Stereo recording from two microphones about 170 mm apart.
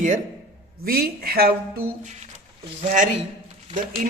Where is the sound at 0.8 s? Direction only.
60° right (ahead or behind).